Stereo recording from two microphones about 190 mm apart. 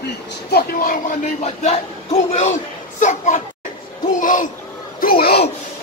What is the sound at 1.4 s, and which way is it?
A man's voice, 35° left (ahead or behind).